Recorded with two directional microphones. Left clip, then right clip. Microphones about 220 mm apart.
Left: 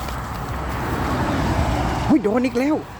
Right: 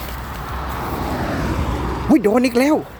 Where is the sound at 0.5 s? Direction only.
45° right (ahead or behind).